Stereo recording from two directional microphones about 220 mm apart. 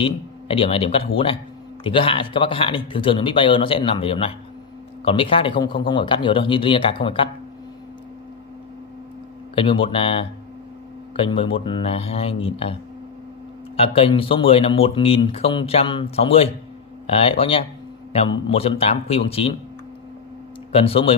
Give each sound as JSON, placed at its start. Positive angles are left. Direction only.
{"t": 0.0, "sound": "speech", "side_deg": 25}
{"t": 9.6, "sound": "speech", "side_deg": 25}
{"t": 13.7, "sound": "speech", "side_deg": 25}
{"t": 20.7, "sound": "speech", "side_deg": 25}